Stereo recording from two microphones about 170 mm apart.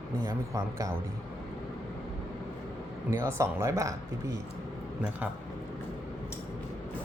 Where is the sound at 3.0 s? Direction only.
15° right (ahead or behind).